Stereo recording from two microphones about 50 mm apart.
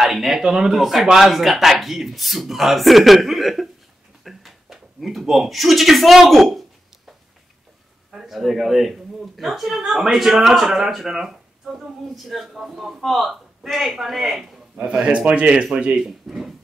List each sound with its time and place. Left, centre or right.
0.0 s speech: centre
8.1 s a man's voice: centre
14.8 s a man's voice: right
16.0 s speech: centre